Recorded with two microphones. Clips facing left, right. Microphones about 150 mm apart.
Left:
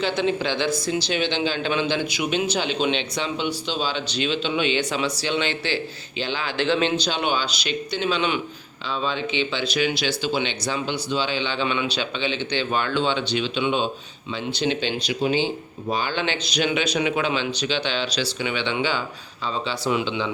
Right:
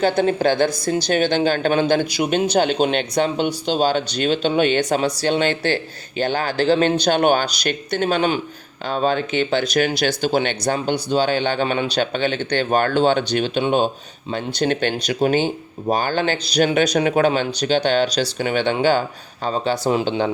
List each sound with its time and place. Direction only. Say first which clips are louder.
0.0 s speech: right 6 dB; 45° right (ahead or behind)